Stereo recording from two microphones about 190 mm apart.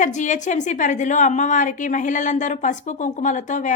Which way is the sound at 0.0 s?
40° left (ahead or behind).